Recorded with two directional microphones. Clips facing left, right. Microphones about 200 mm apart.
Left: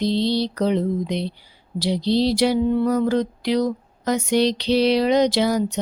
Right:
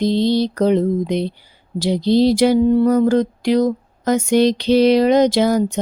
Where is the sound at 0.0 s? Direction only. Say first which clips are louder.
Right 4 dB; 50° right (ahead or behind).